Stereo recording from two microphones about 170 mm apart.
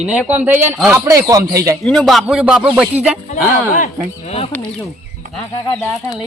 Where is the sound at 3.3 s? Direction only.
45° left (ahead or behind).